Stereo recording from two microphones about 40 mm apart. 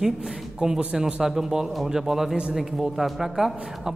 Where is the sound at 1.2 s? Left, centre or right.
Centre.